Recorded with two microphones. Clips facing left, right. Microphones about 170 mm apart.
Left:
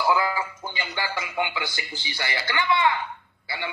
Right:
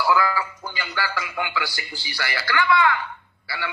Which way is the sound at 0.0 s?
20° left (ahead or behind).